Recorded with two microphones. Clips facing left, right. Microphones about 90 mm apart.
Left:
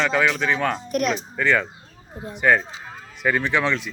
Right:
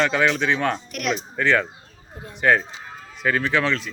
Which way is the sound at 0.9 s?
35° left (ahead or behind).